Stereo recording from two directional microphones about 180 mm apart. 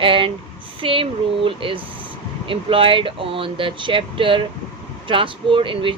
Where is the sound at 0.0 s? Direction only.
30° right (ahead or behind).